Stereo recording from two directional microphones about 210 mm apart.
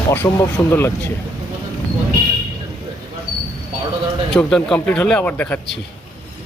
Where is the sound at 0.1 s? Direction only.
10° left (ahead or behind).